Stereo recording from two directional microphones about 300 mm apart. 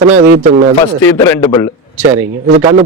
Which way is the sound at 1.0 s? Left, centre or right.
Centre.